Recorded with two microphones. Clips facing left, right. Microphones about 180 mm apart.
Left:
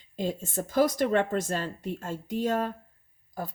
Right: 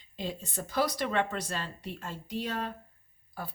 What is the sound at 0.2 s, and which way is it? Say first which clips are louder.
Speech: left 6 dB; 45° left (ahead or behind).